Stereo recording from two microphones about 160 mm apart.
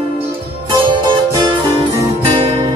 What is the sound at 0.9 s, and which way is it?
Music, 25° right (ahead or behind).